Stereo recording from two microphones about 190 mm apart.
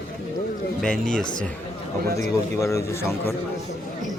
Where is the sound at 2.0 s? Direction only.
50° right (ahead or behind).